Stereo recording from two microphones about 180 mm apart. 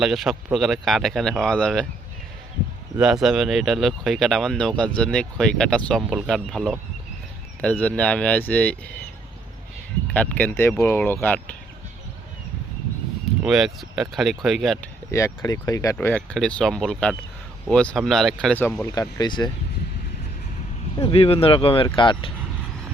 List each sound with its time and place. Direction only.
0.0 s speech: centre (ahead or behind)
3.0 s speech: 5° right (ahead or behind)
10.1 s speech: 10° left (ahead or behind)
13.4 s speech: 5° right (ahead or behind)
15.1 s speech: 15° left (ahead or behind)
18.9 s speech: 20° left (ahead or behind)
20.9 s speech: 30° left (ahead or behind)